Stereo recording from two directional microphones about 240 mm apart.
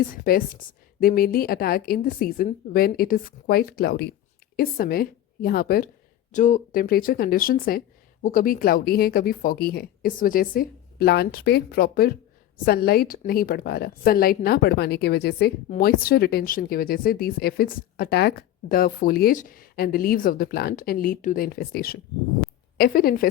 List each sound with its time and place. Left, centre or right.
0.1 s a woman's voice: left